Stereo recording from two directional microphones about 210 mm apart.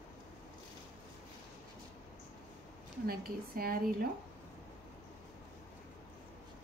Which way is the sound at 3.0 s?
45° right (ahead or behind).